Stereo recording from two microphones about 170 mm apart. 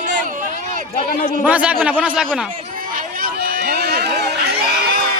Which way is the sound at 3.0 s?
55° right (ahead or behind).